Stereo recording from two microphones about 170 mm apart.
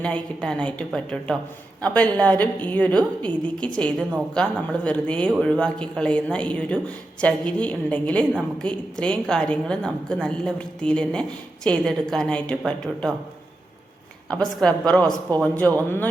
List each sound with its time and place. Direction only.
0.0 s a woman's voice: 5° left (ahead or behind)
14.3 s a woman's voice: 5° left (ahead or behind)